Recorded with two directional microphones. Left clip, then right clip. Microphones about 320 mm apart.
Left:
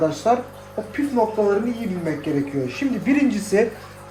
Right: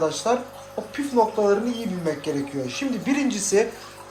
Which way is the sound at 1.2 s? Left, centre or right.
Centre.